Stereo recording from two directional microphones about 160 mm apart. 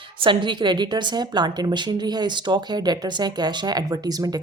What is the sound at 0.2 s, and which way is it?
A woman's voice, 30° right (ahead or behind).